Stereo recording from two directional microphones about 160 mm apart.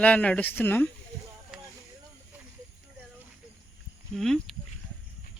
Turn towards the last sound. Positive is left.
turn(degrees=0)  # may be behind; listen again after turning